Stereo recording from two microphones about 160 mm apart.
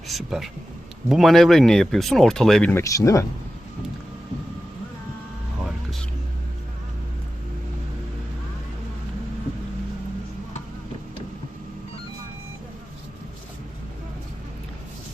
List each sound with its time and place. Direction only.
0.1 s speech: centre (ahead or behind)
2.8 s speech: 20° left (ahead or behind)
5.6 s music: centre (ahead or behind)